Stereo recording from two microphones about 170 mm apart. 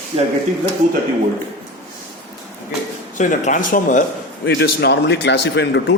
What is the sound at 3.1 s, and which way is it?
Speech, 45° left (ahead or behind).